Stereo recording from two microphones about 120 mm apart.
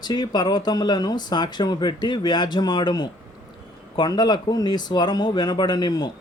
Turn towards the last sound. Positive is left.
turn(degrees=35)  # may be behind; listen again after turning